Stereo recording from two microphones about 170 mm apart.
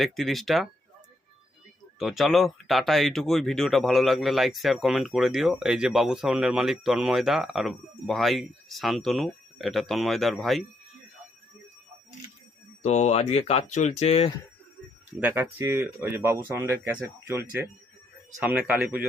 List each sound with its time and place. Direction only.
0.0 s speech: centre (ahead or behind)
2.0 s speech: centre (ahead or behind)
12.8 s speech: 40° left (ahead or behind)
15.2 s speech: 15° right (ahead or behind)